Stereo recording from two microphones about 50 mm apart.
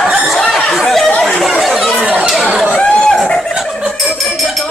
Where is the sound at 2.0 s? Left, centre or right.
Right.